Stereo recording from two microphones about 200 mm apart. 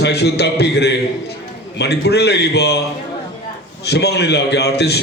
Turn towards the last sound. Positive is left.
turn(degrees=55)  # may be behind; listen again after turning